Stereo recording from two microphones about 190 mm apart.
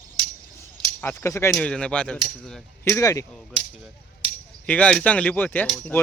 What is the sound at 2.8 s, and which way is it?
Speech, 15° left (ahead or behind).